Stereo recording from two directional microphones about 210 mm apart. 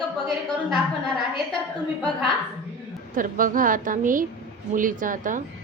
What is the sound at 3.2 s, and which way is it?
Speech, 40° right (ahead or behind).